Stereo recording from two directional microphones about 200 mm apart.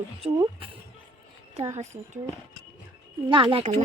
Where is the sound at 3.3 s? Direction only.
25° right (ahead or behind).